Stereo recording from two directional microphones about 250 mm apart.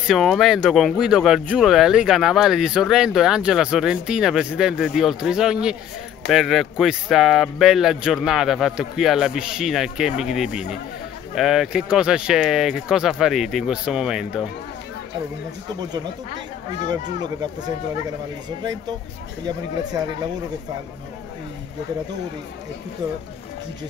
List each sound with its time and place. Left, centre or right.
0.0 s speech: centre
16.8 s speech: centre